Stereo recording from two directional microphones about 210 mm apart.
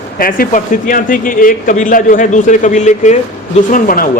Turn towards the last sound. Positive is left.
turn(degrees=40)  # may be behind; listen again after turning